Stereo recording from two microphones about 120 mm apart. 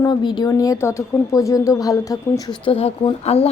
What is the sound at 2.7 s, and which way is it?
Speech, 55° left (ahead or behind).